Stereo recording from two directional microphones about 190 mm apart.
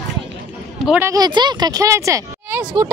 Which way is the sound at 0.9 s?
15° right (ahead or behind).